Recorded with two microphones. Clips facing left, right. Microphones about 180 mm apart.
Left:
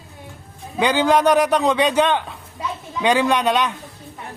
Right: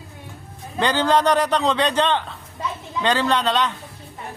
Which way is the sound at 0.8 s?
10° left (ahead or behind).